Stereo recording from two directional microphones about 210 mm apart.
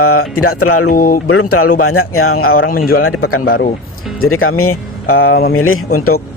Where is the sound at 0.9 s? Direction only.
45° left (ahead or behind).